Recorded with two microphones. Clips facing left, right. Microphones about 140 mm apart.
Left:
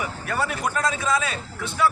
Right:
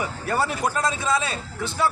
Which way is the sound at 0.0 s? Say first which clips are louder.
Right 2 dB; 30° right (ahead or behind).